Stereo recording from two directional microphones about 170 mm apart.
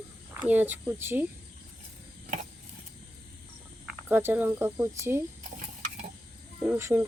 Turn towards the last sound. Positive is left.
turn(degrees=-15)  # may be behind; listen again after turning